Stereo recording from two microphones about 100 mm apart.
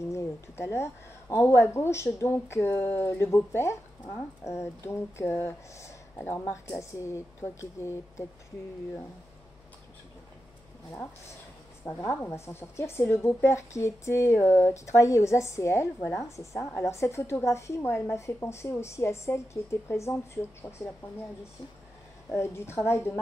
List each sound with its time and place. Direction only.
0.1 s a woman's voice: 25° left (ahead or behind)
11.8 s a woman's voice: 25° left (ahead or behind)
22.3 s a woman's voice: 25° left (ahead or behind)